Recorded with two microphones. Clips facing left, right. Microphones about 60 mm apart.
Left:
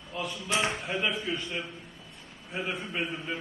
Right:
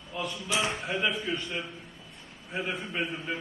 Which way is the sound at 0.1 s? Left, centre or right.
Centre.